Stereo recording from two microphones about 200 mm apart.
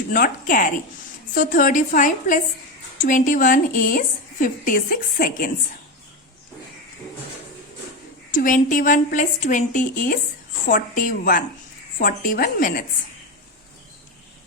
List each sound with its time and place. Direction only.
0.1 s a woman's voice: 45° left (ahead or behind)
8.3 s a woman's voice: 40° left (ahead or behind)